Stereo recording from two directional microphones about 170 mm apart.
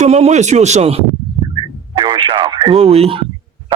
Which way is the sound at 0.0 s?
40° right (ahead or behind).